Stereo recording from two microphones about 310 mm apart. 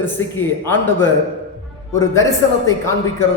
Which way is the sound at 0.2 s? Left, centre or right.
Left.